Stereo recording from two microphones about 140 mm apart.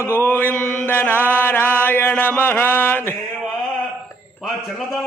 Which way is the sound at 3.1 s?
5° right (ahead or behind).